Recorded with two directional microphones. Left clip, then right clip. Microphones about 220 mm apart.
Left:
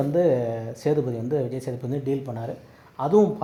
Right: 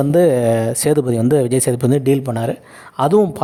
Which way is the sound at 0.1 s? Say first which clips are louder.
Right 10 dB; 50° right (ahead or behind).